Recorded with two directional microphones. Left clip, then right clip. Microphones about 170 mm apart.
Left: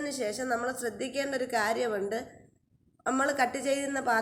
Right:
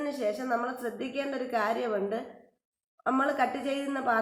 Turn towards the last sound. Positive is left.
turn(degrees=20)  # may be behind; listen again after turning